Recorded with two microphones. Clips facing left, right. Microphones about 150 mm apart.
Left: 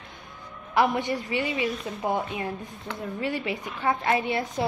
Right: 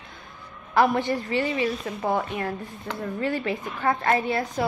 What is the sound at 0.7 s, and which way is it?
A woman's voice, 15° left (ahead or behind).